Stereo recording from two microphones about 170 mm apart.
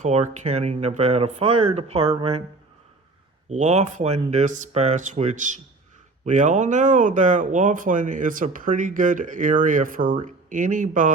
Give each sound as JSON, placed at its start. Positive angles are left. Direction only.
{"t": 0.0, "sound": "speech", "side_deg": -40}
{"t": 3.5, "sound": "speech", "side_deg": -45}